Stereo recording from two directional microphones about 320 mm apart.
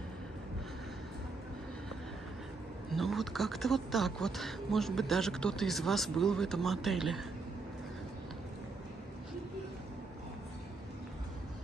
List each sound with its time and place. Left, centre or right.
2.9 s speech: centre